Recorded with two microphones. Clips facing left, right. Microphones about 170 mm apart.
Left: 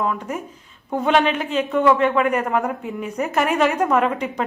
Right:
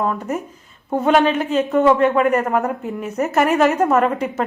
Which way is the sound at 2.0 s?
5° right (ahead or behind).